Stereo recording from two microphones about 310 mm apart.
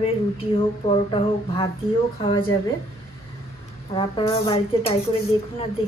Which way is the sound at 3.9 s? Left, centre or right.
Centre.